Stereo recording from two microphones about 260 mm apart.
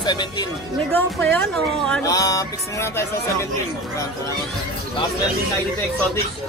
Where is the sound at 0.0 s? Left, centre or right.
Centre.